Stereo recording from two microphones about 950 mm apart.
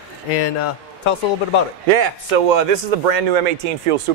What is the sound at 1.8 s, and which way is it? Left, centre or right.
A man's voice, right.